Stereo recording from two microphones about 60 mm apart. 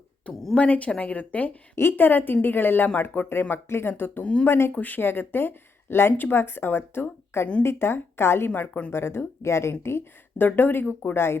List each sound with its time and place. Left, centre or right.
0.5 s speech: left
1.7 s speech: left
4.7 s a woman's voice: left
8.9 s a woman's voice: left
10.3 s speech: left